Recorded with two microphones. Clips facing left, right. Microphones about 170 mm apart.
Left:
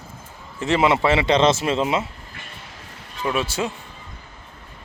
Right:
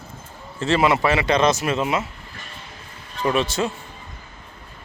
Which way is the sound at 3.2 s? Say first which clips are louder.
Right 2 dB; 5° left (ahead or behind).